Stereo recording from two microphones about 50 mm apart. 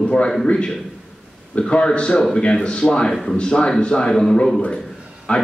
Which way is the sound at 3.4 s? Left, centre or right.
Centre.